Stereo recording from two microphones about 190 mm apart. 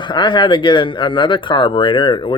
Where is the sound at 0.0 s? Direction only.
25° left (ahead or behind).